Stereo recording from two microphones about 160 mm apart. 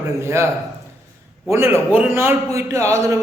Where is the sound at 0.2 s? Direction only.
15° right (ahead or behind).